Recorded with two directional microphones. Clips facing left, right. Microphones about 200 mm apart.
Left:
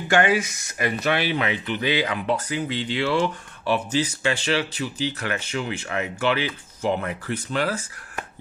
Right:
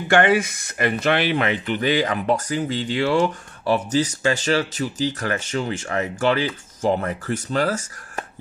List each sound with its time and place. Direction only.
0.1 s speech: 55° right (ahead or behind)